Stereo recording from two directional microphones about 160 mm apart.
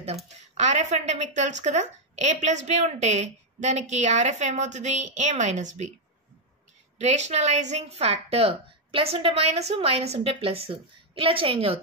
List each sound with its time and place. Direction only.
0.6 s a woman's voice: 50° right (ahead or behind)
7.0 s a woman's voice: 45° right (ahead or behind)